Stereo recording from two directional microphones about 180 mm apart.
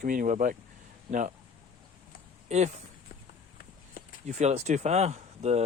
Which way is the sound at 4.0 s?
50° left (ahead or behind).